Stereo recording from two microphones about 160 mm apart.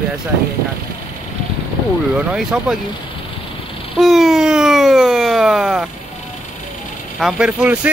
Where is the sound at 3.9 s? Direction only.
Centre (ahead or behind).